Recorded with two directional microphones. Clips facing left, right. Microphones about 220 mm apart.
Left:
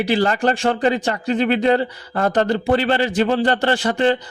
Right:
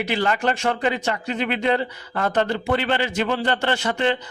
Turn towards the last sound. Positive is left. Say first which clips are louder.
# left 4 dB
turn(degrees=35)  # may be behind; listen again after turning